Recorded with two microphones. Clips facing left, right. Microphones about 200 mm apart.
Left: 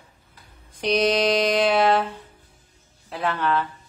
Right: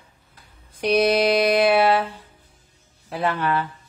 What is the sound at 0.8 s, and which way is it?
Mantra, 10° right (ahead or behind).